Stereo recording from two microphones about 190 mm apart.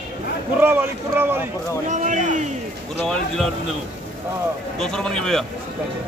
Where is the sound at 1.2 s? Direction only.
10° right (ahead or behind).